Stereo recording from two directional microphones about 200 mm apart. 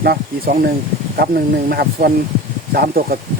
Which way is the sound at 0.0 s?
50° right (ahead or behind).